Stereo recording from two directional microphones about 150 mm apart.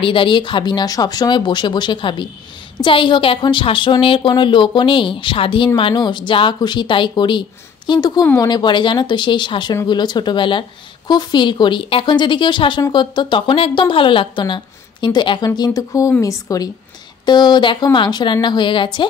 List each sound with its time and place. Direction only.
0.0 s speech: 35° left (ahead or behind)